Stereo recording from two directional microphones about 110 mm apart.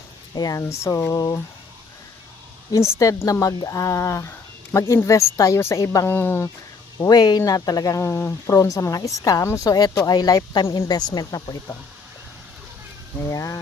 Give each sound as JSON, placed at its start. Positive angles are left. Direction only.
{"t": 0.3, "sound": "speech", "side_deg": 30}
{"t": 2.7, "sound": "speech", "side_deg": 30}
{"t": 7.1, "sound": "speech", "side_deg": 40}
{"t": 13.3, "sound": "speech", "side_deg": 30}